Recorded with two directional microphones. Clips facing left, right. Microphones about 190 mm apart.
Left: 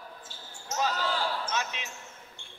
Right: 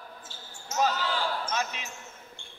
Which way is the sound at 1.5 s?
45° right (ahead or behind).